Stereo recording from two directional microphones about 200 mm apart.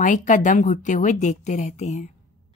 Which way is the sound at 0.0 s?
40° left (ahead or behind).